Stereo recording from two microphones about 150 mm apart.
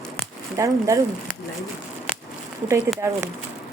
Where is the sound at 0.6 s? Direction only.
20° right (ahead or behind).